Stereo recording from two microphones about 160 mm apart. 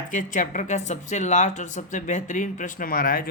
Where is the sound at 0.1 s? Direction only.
55° left (ahead or behind).